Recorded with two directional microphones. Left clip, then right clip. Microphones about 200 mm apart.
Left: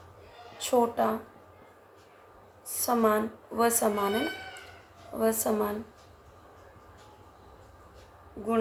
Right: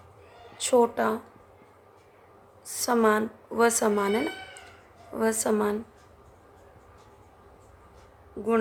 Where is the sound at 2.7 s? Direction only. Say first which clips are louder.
Right 2 dB; 40° right (ahead or behind).